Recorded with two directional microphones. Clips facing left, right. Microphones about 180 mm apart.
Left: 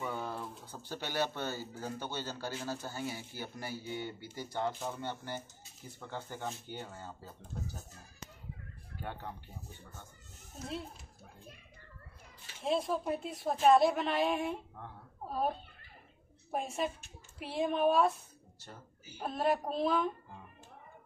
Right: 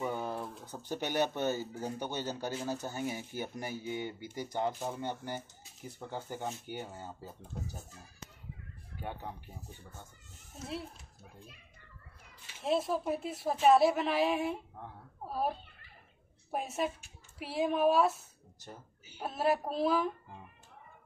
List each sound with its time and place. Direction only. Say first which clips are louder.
0.0 s speech: right 3 dB; 15° right (ahead or behind)
12.6 s a woman's voice: right 1 dB; centre (ahead or behind)
16.5 s a woman's voice: right 1 dB; centre (ahead or behind)